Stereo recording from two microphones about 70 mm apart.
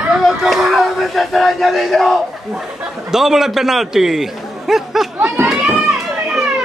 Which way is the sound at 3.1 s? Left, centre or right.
Centre.